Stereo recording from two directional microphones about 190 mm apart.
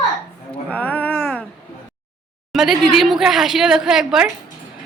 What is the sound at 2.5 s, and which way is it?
A woman's voice, centre (ahead or behind).